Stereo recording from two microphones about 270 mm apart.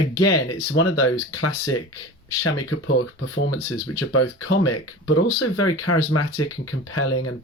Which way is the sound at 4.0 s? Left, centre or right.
Left.